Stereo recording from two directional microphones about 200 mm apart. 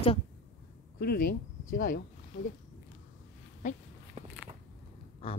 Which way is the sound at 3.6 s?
40° left (ahead or behind).